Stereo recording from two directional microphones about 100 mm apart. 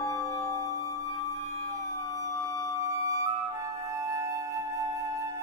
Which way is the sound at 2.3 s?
35° left (ahead or behind).